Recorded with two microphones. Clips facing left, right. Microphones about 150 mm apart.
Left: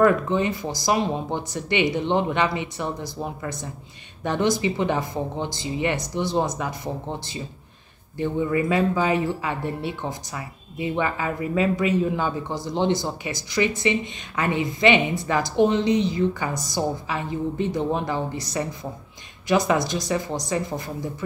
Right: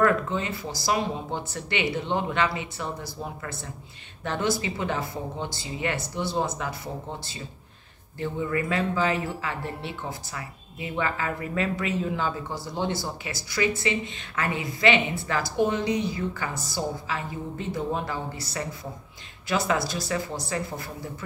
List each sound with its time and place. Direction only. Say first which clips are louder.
0.0 s speech: left 5 dB; 20° left (ahead or behind)
8.2 s speech: left 5 dB; 20° left (ahead or behind)